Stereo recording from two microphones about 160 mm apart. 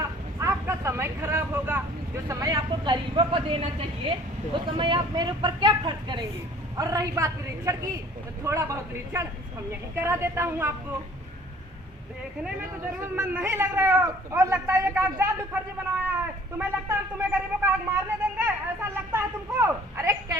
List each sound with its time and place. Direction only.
0.0 s vehicle: 20° right (ahead or behind)
2.2 s a woman's voice: 20° right (ahead or behind)
12.4 s speech: 15° right (ahead or behind)